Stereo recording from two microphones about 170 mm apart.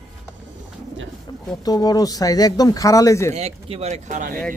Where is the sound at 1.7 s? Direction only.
20° left (ahead or behind).